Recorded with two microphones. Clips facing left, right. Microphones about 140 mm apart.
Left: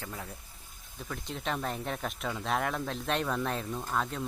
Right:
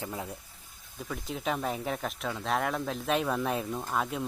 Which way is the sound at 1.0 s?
5° right (ahead or behind).